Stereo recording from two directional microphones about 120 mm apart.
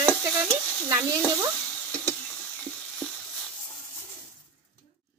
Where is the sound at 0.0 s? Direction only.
15° right (ahead or behind).